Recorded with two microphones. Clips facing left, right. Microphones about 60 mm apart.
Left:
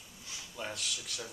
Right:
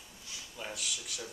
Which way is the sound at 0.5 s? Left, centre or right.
Centre.